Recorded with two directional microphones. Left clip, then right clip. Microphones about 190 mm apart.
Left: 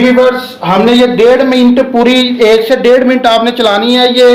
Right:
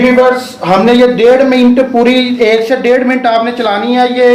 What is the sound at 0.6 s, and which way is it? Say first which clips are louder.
A man's voice: right 1 dB; 25° left (ahead or behind).